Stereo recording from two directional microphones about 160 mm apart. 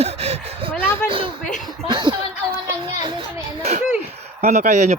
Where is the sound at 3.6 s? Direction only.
45° right (ahead or behind).